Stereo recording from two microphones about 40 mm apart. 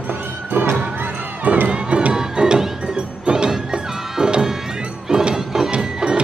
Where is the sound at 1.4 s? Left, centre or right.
Right; by 5.7 s centre.